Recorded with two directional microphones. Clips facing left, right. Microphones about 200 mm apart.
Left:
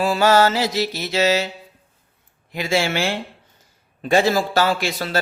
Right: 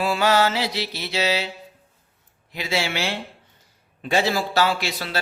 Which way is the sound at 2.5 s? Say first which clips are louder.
Left 5 dB; 50° left (ahead or behind).